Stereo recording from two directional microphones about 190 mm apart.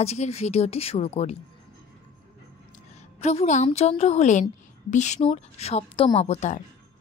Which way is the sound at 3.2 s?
35° left (ahead or behind).